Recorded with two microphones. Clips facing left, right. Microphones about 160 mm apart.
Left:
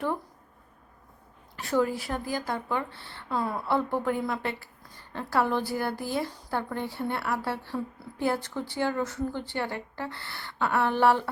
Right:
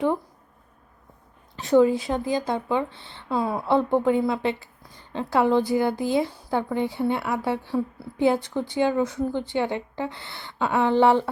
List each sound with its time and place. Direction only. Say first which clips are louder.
1.5 s a woman's voice: right 8 dB; 20° right (ahead or behind)